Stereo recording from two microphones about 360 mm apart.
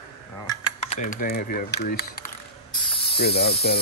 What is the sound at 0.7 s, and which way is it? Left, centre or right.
Speech, centre.